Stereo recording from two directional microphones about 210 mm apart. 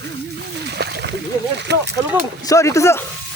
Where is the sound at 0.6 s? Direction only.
50° right (ahead or behind).